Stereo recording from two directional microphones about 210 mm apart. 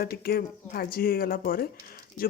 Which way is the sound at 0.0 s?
45° left (ahead or behind).